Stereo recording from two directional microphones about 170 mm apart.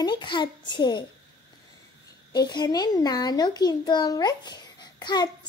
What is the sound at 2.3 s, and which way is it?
A child's voice, 25° left (ahead or behind).